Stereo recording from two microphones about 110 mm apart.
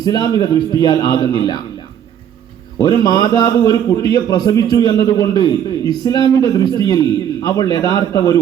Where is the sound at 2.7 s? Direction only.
40° left (ahead or behind).